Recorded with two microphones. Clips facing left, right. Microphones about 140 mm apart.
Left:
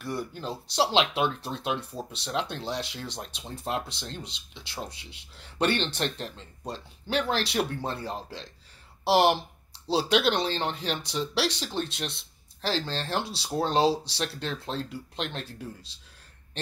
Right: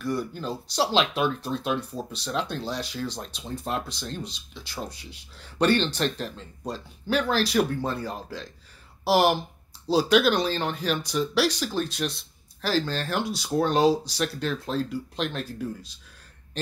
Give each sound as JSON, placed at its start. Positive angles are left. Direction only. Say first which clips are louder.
{"t": 0.0, "sound": "speech", "louder": "right 4 dB", "side_deg": 25}